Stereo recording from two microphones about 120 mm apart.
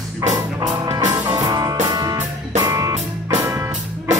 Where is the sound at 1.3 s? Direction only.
35° right (ahead or behind).